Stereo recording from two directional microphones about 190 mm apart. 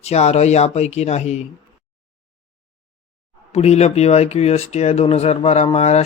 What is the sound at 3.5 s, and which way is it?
Speech, 35° left (ahead or behind).